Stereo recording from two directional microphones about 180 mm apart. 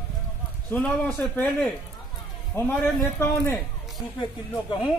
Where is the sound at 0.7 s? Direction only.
10° left (ahead or behind).